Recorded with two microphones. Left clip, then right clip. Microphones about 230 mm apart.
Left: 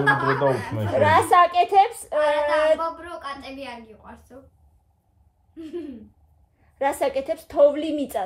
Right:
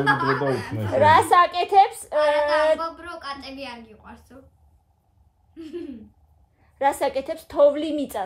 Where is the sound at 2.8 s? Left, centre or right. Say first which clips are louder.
Left 2 dB; centre.